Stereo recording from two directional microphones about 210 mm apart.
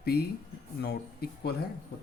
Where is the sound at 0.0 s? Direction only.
50° left (ahead or behind).